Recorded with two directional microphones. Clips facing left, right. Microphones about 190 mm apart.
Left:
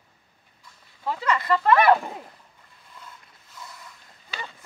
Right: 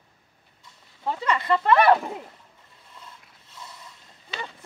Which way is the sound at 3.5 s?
25° right (ahead or behind).